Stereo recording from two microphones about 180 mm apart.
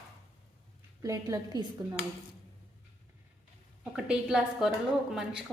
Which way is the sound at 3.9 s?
5° right (ahead or behind).